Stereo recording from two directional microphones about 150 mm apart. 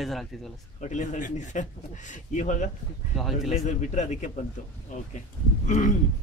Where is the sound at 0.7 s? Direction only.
55° left (ahead or behind).